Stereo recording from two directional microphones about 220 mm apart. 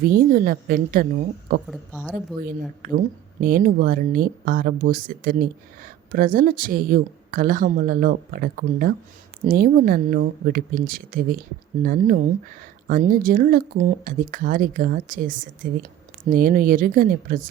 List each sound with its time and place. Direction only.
0.0 s speech: 45° right (ahead or behind)
1.7 s speech: 5° left (ahead or behind)
2.4 s speech: 40° right (ahead or behind)